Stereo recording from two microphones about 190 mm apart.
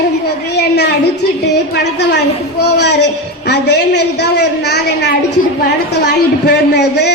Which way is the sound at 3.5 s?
60° left (ahead or behind).